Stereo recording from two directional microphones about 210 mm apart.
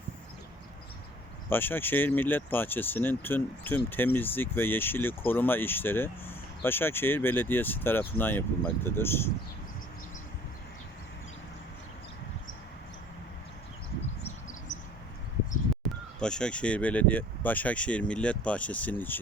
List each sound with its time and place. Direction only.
1.5 s speech: 10° left (ahead or behind)
14.7 s a sound: 60° left (ahead or behind)
16.2 s speech: 5° left (ahead or behind)